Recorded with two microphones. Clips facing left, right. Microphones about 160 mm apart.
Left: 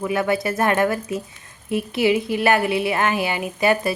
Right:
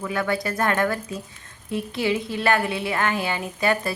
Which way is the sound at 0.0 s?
20° left (ahead or behind).